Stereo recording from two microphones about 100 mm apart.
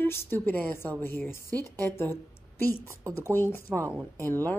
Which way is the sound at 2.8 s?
30° right (ahead or behind).